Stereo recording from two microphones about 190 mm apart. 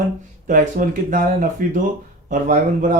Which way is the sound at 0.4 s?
45° right (ahead or behind).